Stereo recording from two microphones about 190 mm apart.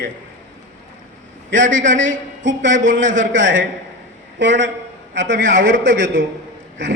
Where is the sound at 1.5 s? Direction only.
80° right.